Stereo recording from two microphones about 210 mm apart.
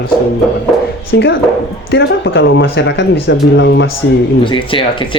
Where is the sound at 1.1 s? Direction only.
55° left (ahead or behind).